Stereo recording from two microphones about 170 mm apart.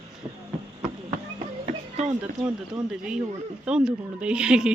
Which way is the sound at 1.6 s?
40° right (ahead or behind).